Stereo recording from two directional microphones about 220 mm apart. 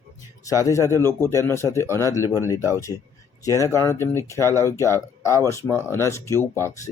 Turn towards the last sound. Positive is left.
turn(degrees=10)  # may be behind; listen again after turning